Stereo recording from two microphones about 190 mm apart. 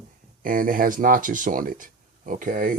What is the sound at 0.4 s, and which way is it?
Speech, 45° right (ahead or behind).